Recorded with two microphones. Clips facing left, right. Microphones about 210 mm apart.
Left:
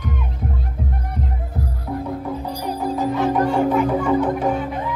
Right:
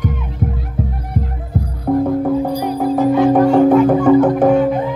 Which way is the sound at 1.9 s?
50° right (ahead or behind).